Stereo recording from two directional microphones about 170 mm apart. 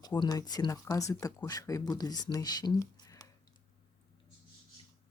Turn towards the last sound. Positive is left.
turn(degrees=25)  # may be behind; listen again after turning